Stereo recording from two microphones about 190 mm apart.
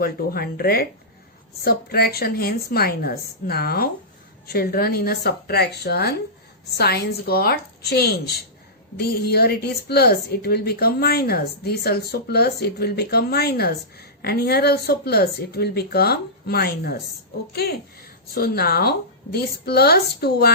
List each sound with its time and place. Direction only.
0.0 s a woman's voice: 50° left (ahead or behind)